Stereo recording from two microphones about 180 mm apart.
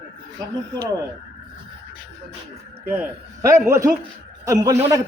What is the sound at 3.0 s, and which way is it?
A man's voice, 15° right (ahead or behind).